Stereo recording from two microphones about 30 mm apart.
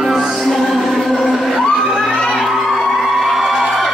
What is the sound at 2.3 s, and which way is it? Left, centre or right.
Crowd, centre.